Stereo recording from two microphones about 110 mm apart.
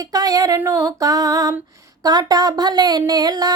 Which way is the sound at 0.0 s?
35° right (ahead or behind).